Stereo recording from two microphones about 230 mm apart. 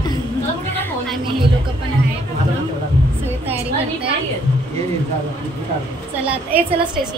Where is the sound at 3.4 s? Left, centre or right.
Right.